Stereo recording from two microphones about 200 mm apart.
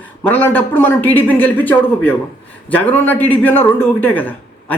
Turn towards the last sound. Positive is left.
turn(degrees=10)  # may be behind; listen again after turning